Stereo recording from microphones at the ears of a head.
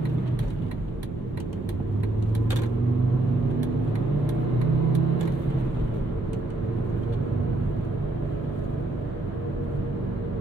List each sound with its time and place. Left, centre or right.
4.6 s vehicle: right